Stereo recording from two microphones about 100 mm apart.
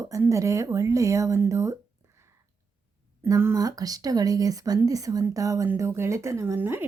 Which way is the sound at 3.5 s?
40° right (ahead or behind).